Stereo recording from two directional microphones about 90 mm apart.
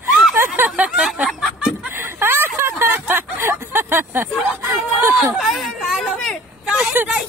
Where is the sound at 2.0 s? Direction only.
25° right (ahead or behind).